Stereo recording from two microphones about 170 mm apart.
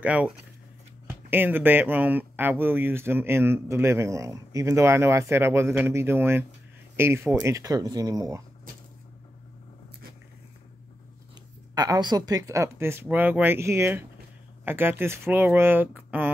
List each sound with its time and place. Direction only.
0.0 s speech: 10° right (ahead or behind)
11.7 s speech: 25° right (ahead or behind)